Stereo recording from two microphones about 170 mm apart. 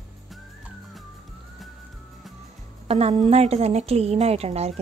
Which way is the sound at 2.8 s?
35° right (ahead or behind).